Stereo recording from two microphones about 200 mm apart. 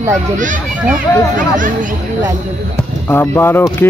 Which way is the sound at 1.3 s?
40° right (ahead or behind).